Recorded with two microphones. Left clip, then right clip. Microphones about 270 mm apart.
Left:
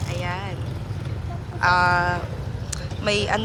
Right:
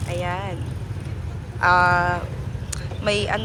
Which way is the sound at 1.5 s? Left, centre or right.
Centre.